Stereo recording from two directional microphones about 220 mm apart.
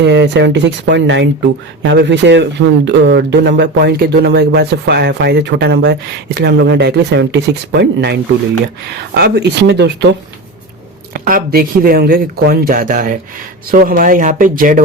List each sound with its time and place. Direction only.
0.0 s speech: 50° right (ahead or behind)
11.1 s speech: 40° right (ahead or behind)